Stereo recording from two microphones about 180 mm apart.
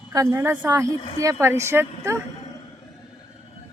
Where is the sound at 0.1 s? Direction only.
20° right (ahead or behind).